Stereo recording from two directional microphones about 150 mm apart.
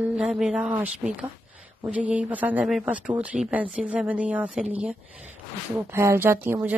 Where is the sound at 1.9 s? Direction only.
10° right (ahead or behind).